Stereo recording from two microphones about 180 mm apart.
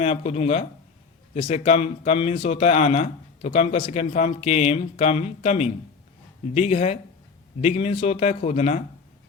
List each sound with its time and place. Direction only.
0.0 s speech: 35° left (ahead or behind)